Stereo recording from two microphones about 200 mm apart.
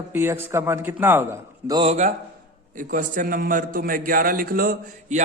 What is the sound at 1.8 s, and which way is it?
A man's voice, 35° right (ahead or behind).